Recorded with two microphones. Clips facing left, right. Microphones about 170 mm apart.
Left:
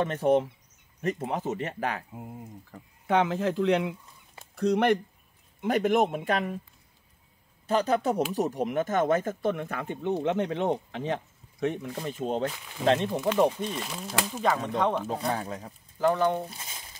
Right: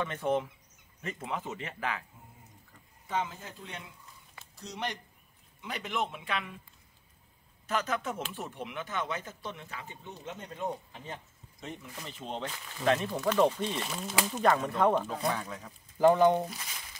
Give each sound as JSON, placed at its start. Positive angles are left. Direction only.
{"t": 0.0, "sound": "speech", "side_deg": 40}
{"t": 2.1, "sound": "speech", "side_deg": 80}
{"t": 4.4, "sound": "speech", "side_deg": 60}
{"t": 5.6, "sound": "speech", "side_deg": 45}
{"t": 7.6, "sound": "speech", "side_deg": 35}
{"t": 12.0, "sound": "speech", "side_deg": 45}
{"t": 12.8, "sound": "speech", "side_deg": 30}
{"t": 13.1, "sound": "speech", "side_deg": 15}
{"t": 13.7, "sound": "speech", "side_deg": 0}
{"t": 15.0, "sound": "speech", "side_deg": 30}
{"t": 16.0, "sound": "speech", "side_deg": -15}
{"t": 16.4, "sound": "speech", "side_deg": 30}